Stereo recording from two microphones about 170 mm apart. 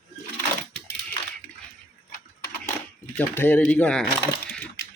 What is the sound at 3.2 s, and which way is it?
Speech, 10° left (ahead or behind).